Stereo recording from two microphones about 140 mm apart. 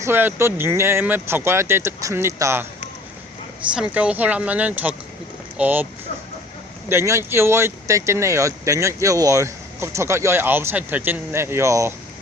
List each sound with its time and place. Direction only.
0.0 s speech: 15° right (ahead or behind)
3.8 s speech: 10° right (ahead or behind)